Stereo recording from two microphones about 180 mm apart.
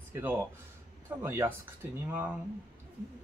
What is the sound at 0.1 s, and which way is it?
Speech, 10° right (ahead or behind).